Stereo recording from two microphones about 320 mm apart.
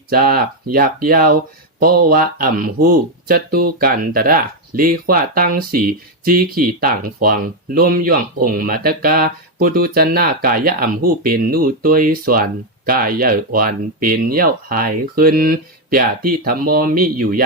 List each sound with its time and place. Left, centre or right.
0.1 s speech: right